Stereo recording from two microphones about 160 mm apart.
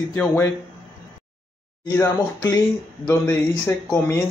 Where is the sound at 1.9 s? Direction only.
15° left (ahead or behind).